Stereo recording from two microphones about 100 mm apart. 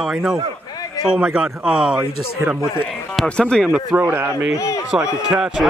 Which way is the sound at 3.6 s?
10° right (ahead or behind).